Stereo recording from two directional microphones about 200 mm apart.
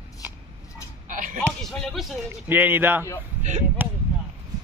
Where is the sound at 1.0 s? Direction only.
40° right (ahead or behind).